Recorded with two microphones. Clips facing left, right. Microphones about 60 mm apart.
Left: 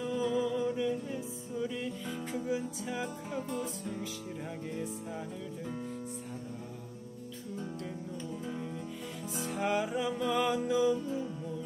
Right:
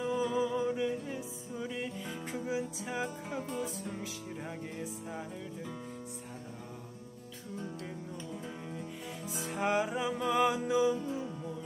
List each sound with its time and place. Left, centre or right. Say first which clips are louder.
0.0 s music: even; centre
3.5 s music: left 1 dB; right
9.6 s music: right 1 dB; centre